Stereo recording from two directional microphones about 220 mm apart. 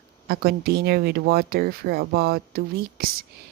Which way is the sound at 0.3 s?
45° right (ahead or behind).